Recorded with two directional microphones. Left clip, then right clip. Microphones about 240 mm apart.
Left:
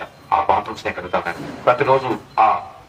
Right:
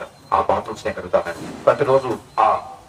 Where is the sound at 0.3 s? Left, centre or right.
Left.